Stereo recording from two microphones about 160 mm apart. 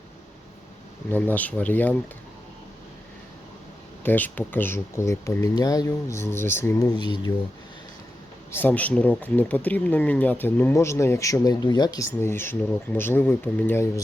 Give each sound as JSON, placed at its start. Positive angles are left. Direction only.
{"t": 1.1, "sound": "speech", "side_deg": 10}
{"t": 4.0, "sound": "speech", "side_deg": 10}
{"t": 8.5, "sound": "speech", "side_deg": 10}